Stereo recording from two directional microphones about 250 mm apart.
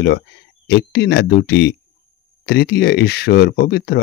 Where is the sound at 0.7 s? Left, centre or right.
Left.